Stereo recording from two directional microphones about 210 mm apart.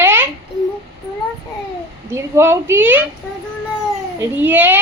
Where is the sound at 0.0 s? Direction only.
10° right (ahead or behind).